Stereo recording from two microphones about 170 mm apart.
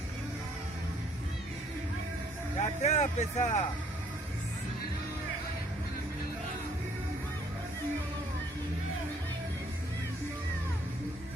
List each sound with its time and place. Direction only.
2.6 s speech: 45° left (ahead or behind)